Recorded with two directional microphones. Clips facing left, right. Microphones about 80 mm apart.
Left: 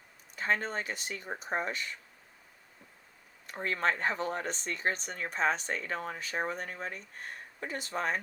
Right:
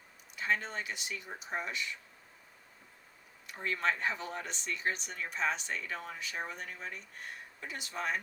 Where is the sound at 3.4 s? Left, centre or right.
Left.